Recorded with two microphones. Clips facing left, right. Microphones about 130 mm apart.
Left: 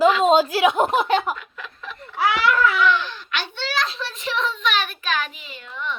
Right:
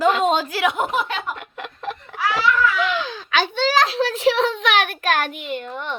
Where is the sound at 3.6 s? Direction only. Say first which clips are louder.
Right 8 dB; 90° right; by 5.9 s 50° right (ahead or behind).